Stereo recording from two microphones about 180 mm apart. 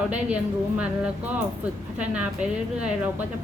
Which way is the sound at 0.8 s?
5° right (ahead or behind).